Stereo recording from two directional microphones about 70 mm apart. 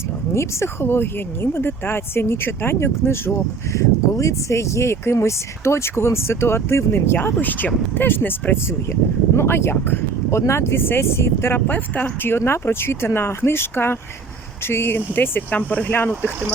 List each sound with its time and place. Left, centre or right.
0.3 s speech: left
12.3 s speech: left